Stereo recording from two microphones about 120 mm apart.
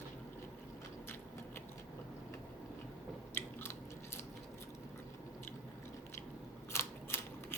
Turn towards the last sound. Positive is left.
turn(degrees=20)  # may be behind; listen again after turning